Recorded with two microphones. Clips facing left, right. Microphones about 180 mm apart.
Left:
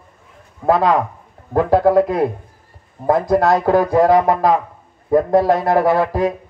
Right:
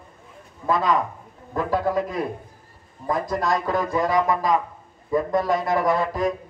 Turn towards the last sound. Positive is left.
turn(degrees=65)  # may be behind; listen again after turning